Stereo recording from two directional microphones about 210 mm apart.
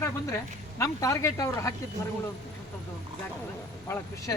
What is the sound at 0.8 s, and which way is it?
Speech, 15° left (ahead or behind).